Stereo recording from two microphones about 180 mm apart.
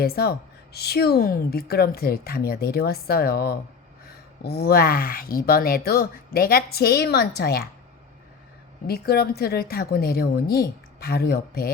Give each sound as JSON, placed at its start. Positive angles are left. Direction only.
{"t": 0.0, "sound": "a woman's voice", "side_deg": 60}
{"t": 8.9, "sound": "a woman's voice", "side_deg": 60}